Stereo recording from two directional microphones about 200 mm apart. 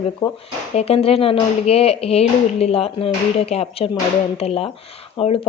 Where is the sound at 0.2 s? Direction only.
20° left (ahead or behind).